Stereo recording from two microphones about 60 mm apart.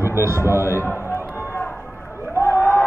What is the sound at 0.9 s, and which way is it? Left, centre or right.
Run, left.